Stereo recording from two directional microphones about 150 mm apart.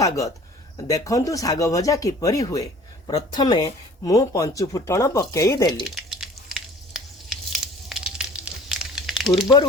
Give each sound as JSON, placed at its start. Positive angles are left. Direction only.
{"t": 0.9, "sound": "speech", "side_deg": 20}
{"t": 5.8, "sound": "frying", "side_deg": 0}
{"t": 7.5, "sound": "a sound", "side_deg": -5}